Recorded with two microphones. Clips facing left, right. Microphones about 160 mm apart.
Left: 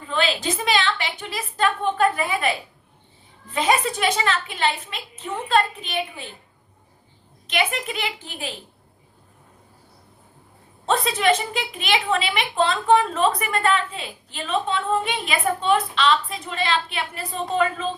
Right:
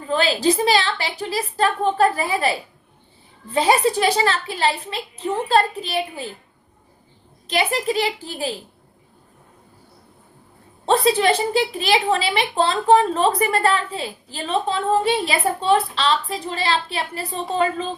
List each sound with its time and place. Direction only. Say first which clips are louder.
0.0 s a woman's voice: right 5 dB; 40° right (ahead or behind)
7.4 s a woman's voice: right 4 dB; 35° right (ahead or behind)
10.8 s a woman's voice: right 3 dB; 35° right (ahead or behind)